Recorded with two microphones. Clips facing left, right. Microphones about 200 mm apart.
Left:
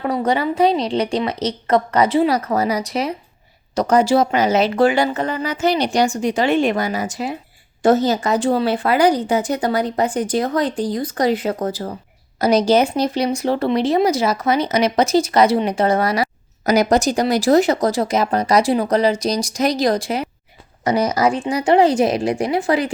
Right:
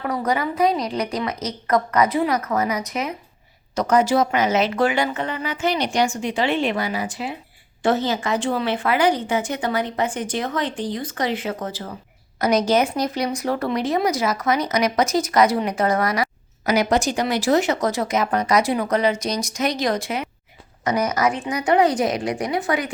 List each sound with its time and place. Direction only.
0.0 s a woman's voice: 30° left (ahead or behind)